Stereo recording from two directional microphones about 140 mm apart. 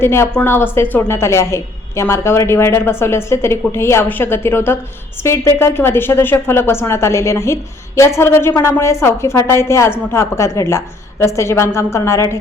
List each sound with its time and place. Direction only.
0.0 s a woman's voice: 15° left (ahead or behind)